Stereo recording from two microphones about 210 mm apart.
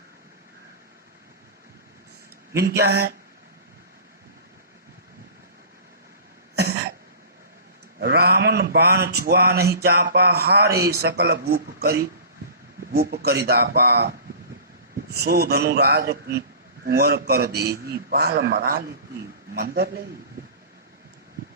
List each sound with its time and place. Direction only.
2.6 s speech: 50° right (ahead or behind)
6.6 s cough: 50° right (ahead or behind)
7.9 s a sound: 50° right (ahead or behind)
9.0 s speech: 50° right (ahead or behind)
15.1 s speech: 50° right (ahead or behind)